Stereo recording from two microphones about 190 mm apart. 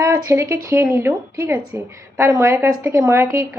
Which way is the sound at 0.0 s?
15° right (ahead or behind).